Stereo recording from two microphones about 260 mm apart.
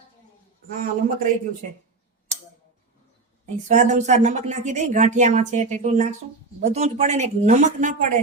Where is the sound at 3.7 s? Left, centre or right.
Right.